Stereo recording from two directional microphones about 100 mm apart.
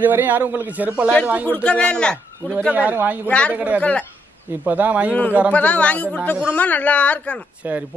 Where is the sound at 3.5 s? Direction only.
15° right (ahead or behind).